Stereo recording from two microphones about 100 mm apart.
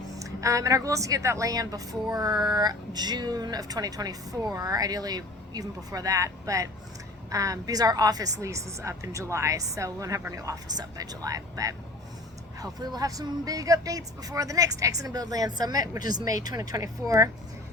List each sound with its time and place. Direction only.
0.2 s a woman's voice: 35° right (ahead or behind)